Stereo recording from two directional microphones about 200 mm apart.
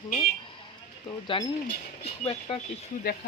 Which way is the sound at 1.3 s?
25° left (ahead or behind).